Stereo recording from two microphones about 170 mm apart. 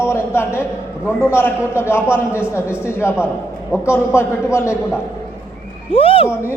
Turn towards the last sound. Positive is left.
turn(degrees=35)  # may be behind; listen again after turning